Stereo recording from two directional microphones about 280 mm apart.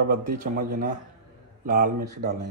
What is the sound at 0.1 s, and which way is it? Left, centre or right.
A man's voice, right.